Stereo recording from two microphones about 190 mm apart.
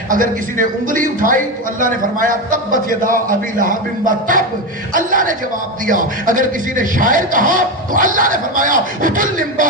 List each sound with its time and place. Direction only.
0.1 s speech: 45° right (ahead or behind)